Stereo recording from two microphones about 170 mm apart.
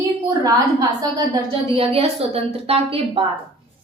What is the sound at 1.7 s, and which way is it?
A woman's voice, 35° right (ahead or behind).